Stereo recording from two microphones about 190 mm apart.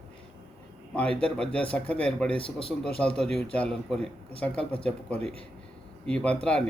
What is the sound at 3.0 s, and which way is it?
Speech, 5° left (ahead or behind).